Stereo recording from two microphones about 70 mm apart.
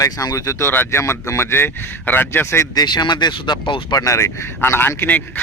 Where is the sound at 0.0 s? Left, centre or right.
Left.